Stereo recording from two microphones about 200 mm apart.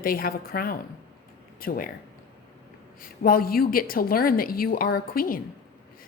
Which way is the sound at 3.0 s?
45° left (ahead or behind).